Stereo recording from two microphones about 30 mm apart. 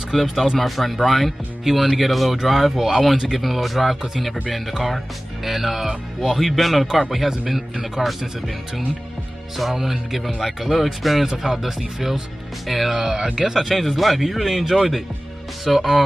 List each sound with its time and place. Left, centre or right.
0.1 s speech: centre
6.3 s speech: centre
8.0 s speech: centre
9.6 s speech: centre
12.9 s speech: centre
13.6 s speech: centre